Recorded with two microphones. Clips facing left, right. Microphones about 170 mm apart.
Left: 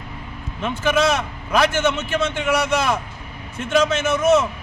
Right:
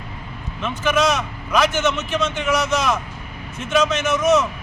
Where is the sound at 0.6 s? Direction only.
30° left (ahead or behind).